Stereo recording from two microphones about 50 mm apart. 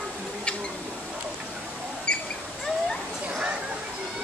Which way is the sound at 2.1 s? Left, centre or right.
Left.